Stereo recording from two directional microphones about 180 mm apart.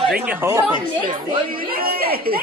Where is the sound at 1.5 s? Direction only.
55° right (ahead or behind).